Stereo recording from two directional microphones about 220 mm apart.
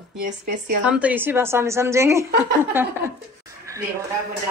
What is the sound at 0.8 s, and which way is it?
Speech, 5° right (ahead or behind).